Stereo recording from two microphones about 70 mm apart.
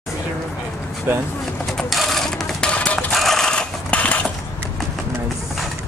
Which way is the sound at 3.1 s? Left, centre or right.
Centre.